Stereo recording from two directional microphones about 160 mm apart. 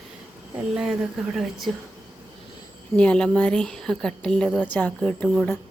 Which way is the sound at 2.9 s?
5° left (ahead or behind).